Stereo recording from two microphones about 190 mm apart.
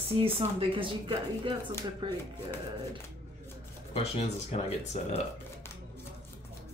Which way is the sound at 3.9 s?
35° left (ahead or behind).